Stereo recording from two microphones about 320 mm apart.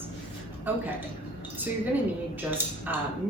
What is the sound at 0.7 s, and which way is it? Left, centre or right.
Speech, centre.